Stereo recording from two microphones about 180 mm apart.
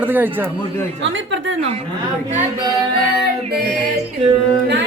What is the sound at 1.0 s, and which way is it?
Speech, 90° right.